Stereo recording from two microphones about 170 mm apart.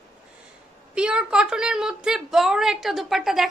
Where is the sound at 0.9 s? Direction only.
5° right (ahead or behind).